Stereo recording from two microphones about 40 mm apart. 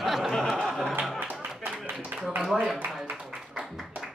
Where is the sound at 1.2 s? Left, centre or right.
Right.